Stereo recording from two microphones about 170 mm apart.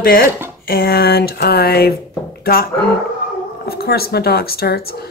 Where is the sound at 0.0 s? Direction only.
60° left (ahead or behind).